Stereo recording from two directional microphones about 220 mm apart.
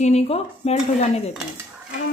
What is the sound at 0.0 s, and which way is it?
Speech, 30° left (ahead or behind).